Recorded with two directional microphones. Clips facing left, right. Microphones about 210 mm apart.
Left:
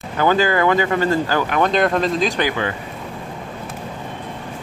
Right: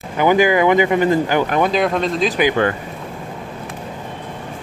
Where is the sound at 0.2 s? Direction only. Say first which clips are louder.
Right 3 dB; 15° right (ahead or behind).